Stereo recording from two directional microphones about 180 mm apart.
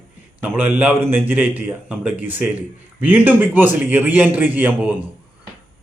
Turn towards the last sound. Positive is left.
turn(degrees=-10)  # may be behind; listen again after turning